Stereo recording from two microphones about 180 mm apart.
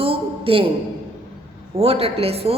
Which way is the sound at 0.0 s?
30° right (ahead or behind).